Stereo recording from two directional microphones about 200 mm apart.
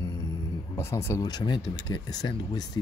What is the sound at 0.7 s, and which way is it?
Speech, 15° left (ahead or behind).